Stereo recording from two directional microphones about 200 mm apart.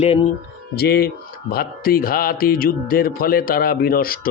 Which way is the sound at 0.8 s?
50° left (ahead or behind).